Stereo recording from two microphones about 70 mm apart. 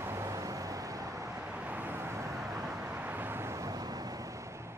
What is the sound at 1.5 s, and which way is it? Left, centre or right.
Vehicle, right.